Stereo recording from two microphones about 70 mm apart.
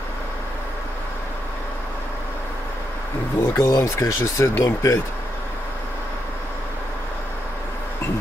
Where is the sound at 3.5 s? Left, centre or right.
Left.